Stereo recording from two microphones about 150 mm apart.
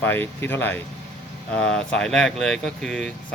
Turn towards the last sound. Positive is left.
turn(degrees=5)  # may be behind; listen again after turning